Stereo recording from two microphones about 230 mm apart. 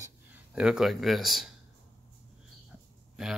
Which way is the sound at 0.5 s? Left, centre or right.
Centre.